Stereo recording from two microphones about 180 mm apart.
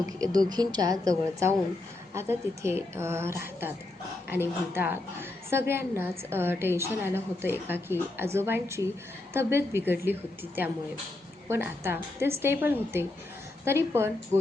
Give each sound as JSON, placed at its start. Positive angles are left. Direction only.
{"t": 0.2, "sound": "a woman's voice", "side_deg": -20}
{"t": 2.1, "sound": "a woman's voice", "side_deg": -15}